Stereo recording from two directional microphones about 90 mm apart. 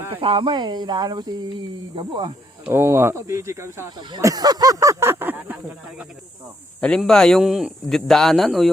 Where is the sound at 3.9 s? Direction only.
60° right (ahead or behind).